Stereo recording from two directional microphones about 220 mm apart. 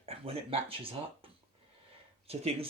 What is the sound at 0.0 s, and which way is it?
Speech, 25° right (ahead or behind).